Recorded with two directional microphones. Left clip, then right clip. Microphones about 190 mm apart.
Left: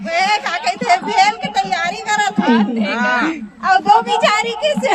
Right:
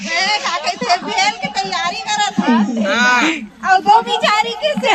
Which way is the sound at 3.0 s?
45° left (ahead or behind).